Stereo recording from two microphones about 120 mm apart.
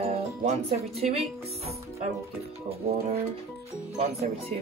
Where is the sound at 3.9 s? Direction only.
80° right.